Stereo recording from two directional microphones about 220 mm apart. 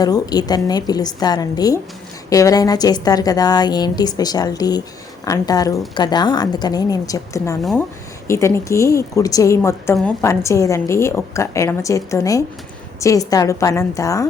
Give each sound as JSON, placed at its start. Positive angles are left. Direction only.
{"t": 0.0, "sound": "a woman's voice", "side_deg": 20}
{"t": 7.6, "sound": "speech", "side_deg": 0}
{"t": 8.3, "sound": "a woman's voice", "side_deg": 10}